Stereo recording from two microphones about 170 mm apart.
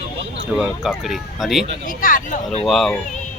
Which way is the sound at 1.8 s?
55° left (ahead or behind).